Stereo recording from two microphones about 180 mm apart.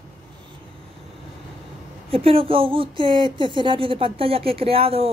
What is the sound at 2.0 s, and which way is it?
Speech, 30° right (ahead or behind).